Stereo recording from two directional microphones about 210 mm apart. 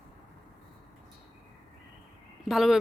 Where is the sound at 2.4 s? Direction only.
Centre (ahead or behind).